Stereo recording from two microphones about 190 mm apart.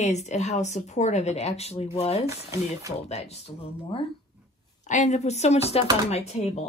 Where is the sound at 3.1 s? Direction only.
35° left (ahead or behind).